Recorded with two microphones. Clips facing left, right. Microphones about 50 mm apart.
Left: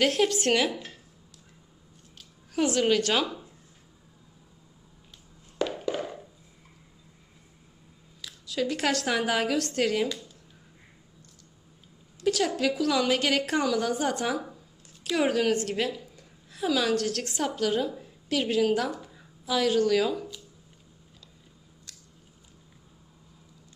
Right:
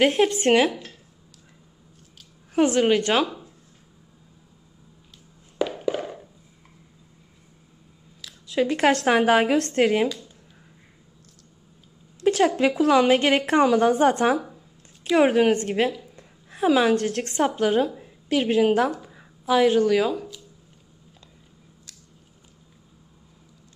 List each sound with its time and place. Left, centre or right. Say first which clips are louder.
0.0 s a woman's voice: right 5 dB; right
2.5 s a woman's voice: right 5 dB; right
5.6 s a sound: right 4 dB; centre
8.5 s a woman's voice: right 7 dB; right
12.3 s a woman's voice: right 6 dB; right